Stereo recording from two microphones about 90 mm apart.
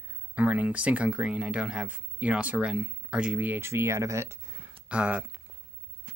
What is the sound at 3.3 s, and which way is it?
Speech, 20° right (ahead or behind).